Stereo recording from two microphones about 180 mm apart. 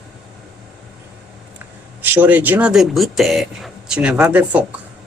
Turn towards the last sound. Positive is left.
turn(degrees=-5)  # may be behind; listen again after turning